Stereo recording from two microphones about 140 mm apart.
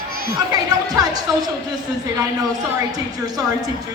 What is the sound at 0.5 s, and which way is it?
Speech, 25° right (ahead or behind).